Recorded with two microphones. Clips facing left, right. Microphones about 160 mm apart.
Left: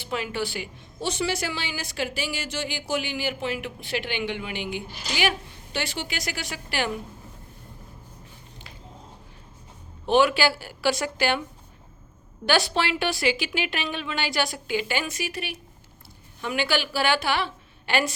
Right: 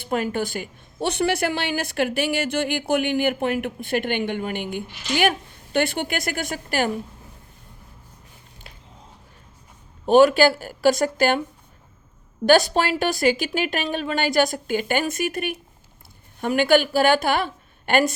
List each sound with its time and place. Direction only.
0.0 s a woman's voice: 50° right (ahead or behind)
10.1 s speech: 45° right (ahead or behind)
12.5 s a woman's voice: 45° right (ahead or behind)